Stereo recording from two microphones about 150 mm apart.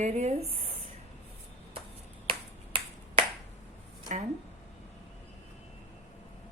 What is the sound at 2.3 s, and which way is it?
Finger snapping, 35° right (ahead or behind).